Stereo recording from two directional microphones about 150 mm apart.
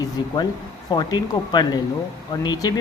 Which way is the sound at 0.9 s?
25° left (ahead or behind).